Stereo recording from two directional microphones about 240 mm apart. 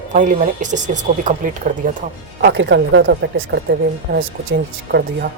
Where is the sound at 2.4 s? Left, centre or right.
Right.